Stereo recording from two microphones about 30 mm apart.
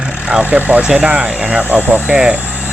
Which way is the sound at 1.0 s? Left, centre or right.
Right.